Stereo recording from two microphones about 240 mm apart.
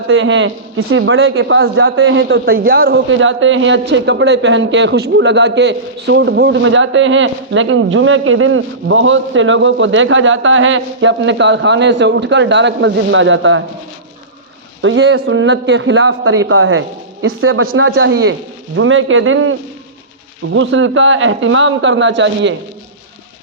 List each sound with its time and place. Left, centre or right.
0.1 s a man's voice: right
14.8 s a man's voice: right